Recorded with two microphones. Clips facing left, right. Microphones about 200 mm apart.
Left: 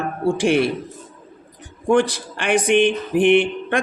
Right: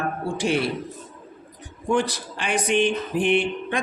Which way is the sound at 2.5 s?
55° left (ahead or behind).